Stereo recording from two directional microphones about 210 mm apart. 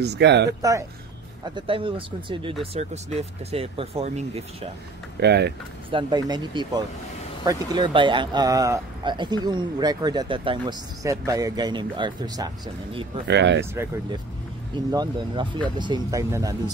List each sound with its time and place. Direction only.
0.0 s speech: 55° right (ahead or behind)
0.6 s speech: 15° right (ahead or behind); by 4.6 s 30° right (ahead or behind)
5.2 s speech: 50° right (ahead or behind)
5.9 s speech: 25° right (ahead or behind)
13.3 s speech: 55° right (ahead or behind)
13.8 s speech: 10° right (ahead or behind)